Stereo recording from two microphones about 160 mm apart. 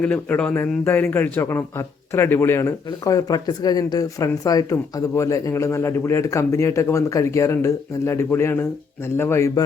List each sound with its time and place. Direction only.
0.0 s speech: 10° left (ahead or behind)